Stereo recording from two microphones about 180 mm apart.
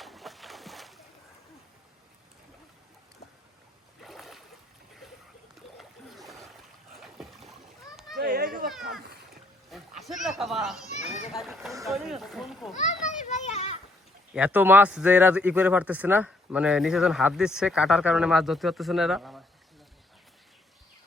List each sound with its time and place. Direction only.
0.0 s splash: centre (ahead or behind)
4.0 s a sound: centre (ahead or behind)
5.7 s splash: centre (ahead or behind)
7.0 s boat: centre (ahead or behind)
8.1 s children playing: 55° right (ahead or behind)
8.9 s splash: 60° right (ahead or behind)
10.0 s a sound: centre (ahead or behind)
10.8 s children playing: 40° left (ahead or behind)
11.3 s speech: centre (ahead or behind)
13.1 s a child's voice: 40° left (ahead or behind)
14.3 s speech: 10° right (ahead or behind)